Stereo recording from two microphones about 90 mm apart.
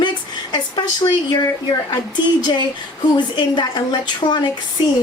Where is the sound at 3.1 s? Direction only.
55° left (ahead or behind).